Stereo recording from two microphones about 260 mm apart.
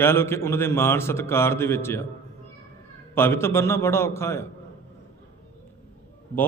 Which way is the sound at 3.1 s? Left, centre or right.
Centre.